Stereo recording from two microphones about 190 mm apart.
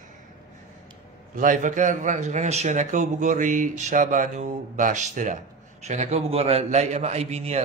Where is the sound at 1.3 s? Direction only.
45° right (ahead or behind).